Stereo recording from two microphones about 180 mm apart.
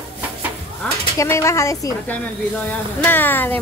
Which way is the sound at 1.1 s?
15° left (ahead or behind).